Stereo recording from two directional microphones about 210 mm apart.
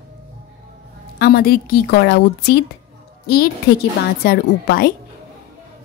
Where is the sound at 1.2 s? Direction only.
45° left (ahead or behind).